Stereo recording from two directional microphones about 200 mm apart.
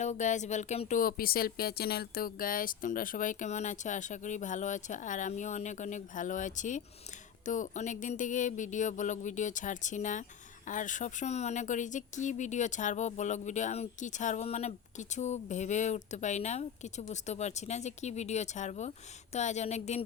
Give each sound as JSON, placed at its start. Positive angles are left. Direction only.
{"t": 0.0, "sound": "speech", "side_deg": 40}